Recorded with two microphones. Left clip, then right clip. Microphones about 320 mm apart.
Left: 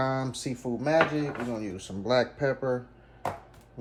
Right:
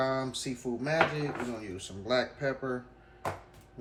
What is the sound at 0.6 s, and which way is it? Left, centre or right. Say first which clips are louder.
Speech: left 3 dB; left.